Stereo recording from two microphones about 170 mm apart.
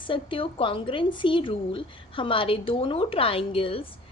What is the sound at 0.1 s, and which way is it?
A woman's voice, 30° left (ahead or behind).